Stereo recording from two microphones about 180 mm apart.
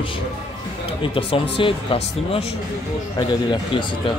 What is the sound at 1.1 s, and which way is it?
A man's voice, 30° left (ahead or behind).